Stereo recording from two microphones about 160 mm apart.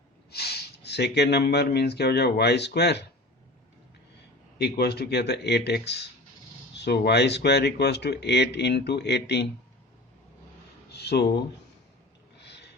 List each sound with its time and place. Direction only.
0.3 s speech: 90° left
4.5 s speech: 90° left
10.9 s speech: 90° left
12.4 s a sound: 90° left